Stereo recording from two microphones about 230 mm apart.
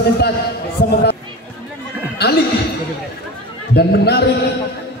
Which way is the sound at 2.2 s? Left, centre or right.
Left.